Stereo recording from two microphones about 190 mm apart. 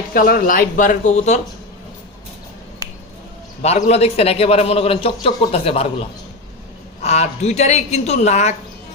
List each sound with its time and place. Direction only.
0.1 s speech: 50° left (ahead or behind)
3.6 s a man's voice: 35° left (ahead or behind)
7.0 s a man's voice: 35° left (ahead or behind)